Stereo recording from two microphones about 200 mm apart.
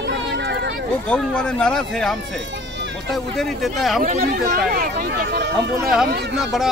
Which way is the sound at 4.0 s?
45° right (ahead or behind).